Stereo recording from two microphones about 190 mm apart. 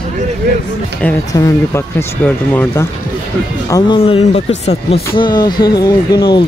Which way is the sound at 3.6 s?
20° left (ahead or behind).